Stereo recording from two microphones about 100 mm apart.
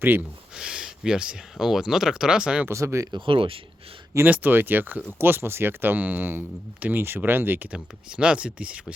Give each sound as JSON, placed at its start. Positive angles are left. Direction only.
{"t": 0.0, "sound": "speech", "side_deg": -20}
{"t": 0.5, "sound": "speech", "side_deg": -10}
{"t": 2.6, "sound": "speech", "side_deg": -30}
{"t": 3.1, "sound": "speech", "side_deg": -60}
{"t": 4.3, "sound": "speech", "side_deg": -20}